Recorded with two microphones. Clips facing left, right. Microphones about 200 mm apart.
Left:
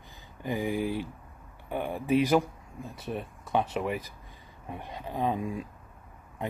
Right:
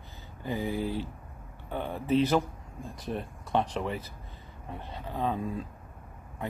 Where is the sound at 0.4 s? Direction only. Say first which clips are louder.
Left 2 dB; 15° left (ahead or behind).